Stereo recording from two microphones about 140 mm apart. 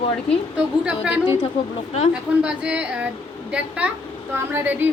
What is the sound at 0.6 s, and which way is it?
A woman's voice, 5° right (ahead or behind).